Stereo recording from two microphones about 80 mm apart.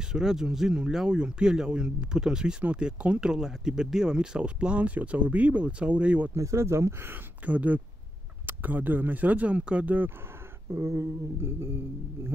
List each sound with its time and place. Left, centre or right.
0.1 s speech: centre
6.3 s speech: right
7.4 s speech: centre
10.7 s speech: right